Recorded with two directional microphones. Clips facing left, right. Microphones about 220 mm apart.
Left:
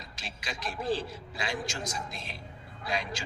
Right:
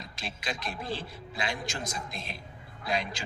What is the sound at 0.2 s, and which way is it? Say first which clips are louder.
Speech: right 3 dB; 55° right (ahead or behind).